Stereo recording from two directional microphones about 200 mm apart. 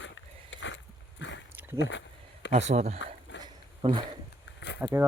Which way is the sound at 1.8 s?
65° left (ahead or behind).